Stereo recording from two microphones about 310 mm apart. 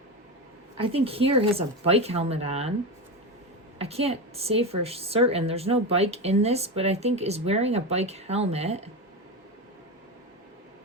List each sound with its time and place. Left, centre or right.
0.8 s a woman's voice: centre
3.8 s a woman's voice: centre